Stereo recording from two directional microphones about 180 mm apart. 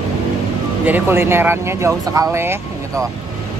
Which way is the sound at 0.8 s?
10° right (ahead or behind).